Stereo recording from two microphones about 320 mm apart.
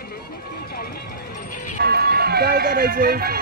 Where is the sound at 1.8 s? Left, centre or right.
Right.